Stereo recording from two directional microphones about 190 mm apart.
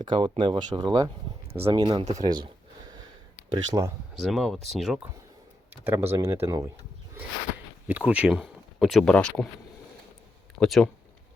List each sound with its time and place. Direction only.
0.0 s speech: 25° right (ahead or behind)
1.5 s speech: 30° right (ahead or behind)
3.5 s speech: 15° right (ahead or behind)
4.2 s speech: centre (ahead or behind)
7.9 s speech: 10° right (ahead or behind)
10.6 s speech: centre (ahead or behind)